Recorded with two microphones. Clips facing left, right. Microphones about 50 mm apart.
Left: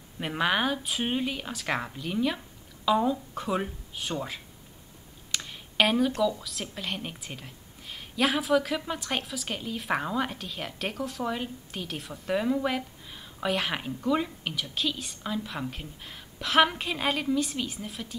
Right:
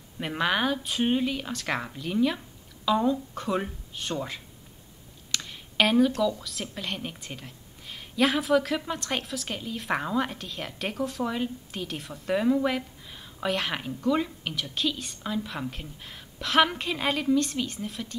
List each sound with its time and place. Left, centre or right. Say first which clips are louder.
0.2 s a woman's voice: even; centre
5.3 s a sound: right 1 dB; centre
6.2 s a woman's voice: even; centre